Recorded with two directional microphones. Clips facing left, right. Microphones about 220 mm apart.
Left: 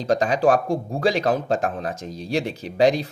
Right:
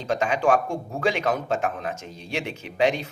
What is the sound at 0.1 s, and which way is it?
Speech, 35° left (ahead or behind).